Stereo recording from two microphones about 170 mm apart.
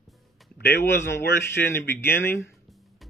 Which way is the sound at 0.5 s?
75° left (ahead or behind).